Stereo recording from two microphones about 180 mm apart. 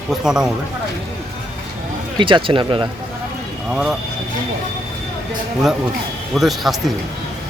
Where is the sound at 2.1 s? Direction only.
25° right (ahead or behind).